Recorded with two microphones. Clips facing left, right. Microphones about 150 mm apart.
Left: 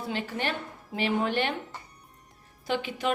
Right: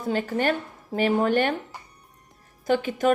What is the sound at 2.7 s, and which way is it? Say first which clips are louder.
Speech: right 7 dB; 45° right (ahead or behind).